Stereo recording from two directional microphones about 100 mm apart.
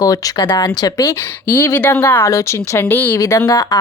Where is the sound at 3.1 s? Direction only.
35° left (ahead or behind).